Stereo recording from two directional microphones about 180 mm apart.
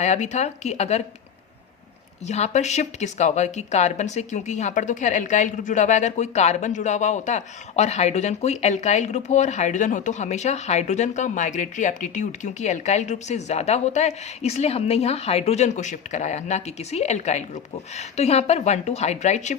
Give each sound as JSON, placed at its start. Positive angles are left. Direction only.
{"t": 0.0, "sound": "speech", "side_deg": 40}
{"t": 2.2, "sound": "speech", "side_deg": 40}